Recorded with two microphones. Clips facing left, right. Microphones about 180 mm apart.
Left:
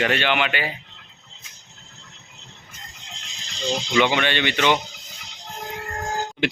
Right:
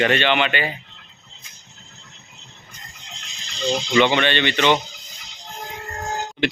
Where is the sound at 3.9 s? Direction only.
10° left (ahead or behind).